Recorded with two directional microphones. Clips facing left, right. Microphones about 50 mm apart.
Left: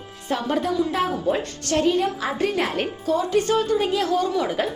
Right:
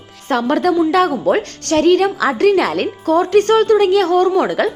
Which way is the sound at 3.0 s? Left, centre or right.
Right.